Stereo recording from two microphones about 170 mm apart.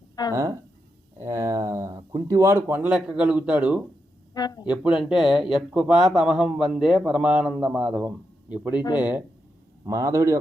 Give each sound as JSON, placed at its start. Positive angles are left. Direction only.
{"t": 0.3, "sound": "speech", "side_deg": -15}
{"t": 4.4, "sound": "speech", "side_deg": 25}
{"t": 4.7, "sound": "speech", "side_deg": -5}